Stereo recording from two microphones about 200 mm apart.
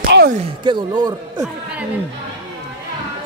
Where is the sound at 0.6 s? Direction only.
25° right (ahead or behind).